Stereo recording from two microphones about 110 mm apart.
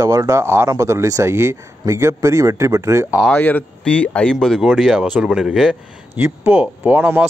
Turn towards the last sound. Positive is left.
turn(degrees=-15)  # may be behind; listen again after turning